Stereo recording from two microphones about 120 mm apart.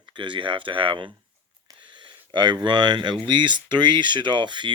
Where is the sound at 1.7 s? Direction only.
40° right (ahead or behind).